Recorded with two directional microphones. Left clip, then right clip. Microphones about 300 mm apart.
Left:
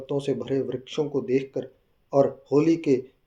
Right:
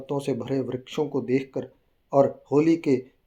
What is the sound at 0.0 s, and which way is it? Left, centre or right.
Speech, right.